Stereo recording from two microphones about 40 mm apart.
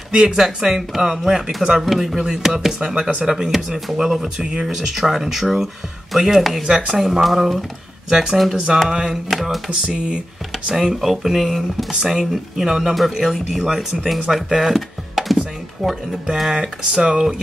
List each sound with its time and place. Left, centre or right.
0.1 s speech: centre
4.4 s speech: centre
9.3 s speech: centre
9.7 s speech: right
11.0 s speech: centre
11.9 s speech: centre
16.4 s speech: centre